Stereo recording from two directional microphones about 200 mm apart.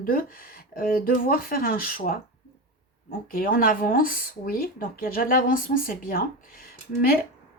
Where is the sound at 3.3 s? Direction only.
45° left (ahead or behind).